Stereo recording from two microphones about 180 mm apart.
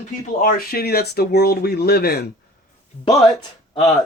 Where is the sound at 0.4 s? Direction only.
55° left (ahead or behind).